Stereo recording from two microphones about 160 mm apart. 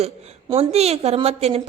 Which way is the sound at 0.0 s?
40° right (ahead or behind).